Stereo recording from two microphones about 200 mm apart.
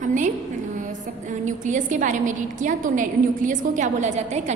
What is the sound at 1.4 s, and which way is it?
A woman's voice, 40° right (ahead or behind).